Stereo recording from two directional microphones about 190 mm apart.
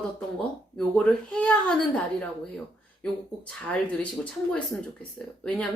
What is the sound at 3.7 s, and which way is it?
A woman's voice, 5° left (ahead or behind).